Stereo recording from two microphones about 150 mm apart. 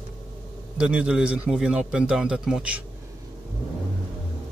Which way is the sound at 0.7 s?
5° right (ahead or behind).